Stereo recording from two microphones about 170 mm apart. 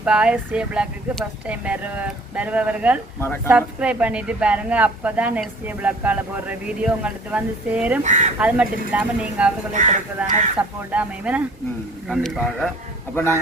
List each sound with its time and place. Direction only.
0.0 s speech: 5° right (ahead or behind)
8.0 s speech: 45° right (ahead or behind)
8.4 s speech: 10° right (ahead or behind)
9.7 s speech: 45° right (ahead or behind)
10.2 s speech: 5° right (ahead or behind)
13.1 s a man's voice: 15° left (ahead or behind)